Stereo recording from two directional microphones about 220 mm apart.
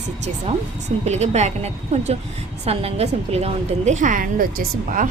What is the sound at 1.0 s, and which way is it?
A woman's voice, 30° right (ahead or behind).